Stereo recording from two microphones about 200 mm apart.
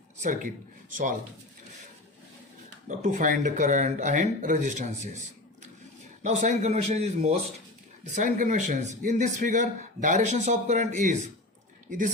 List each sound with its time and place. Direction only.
0.2 s a man's voice: 40° right (ahead or behind)
2.8 s a man's voice: 40° right (ahead or behind)
6.2 s a man's voice: 35° right (ahead or behind)